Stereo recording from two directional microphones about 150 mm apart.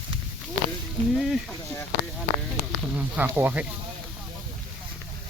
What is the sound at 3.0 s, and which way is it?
Speech, 10° right (ahead or behind).